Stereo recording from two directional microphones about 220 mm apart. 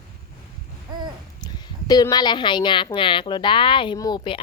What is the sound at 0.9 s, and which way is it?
Babbling, 20° right (ahead or behind).